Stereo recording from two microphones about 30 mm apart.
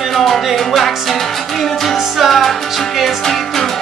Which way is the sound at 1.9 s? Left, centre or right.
Centre.